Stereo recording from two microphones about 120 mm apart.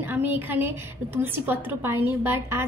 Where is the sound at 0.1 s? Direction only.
15° right (ahead or behind).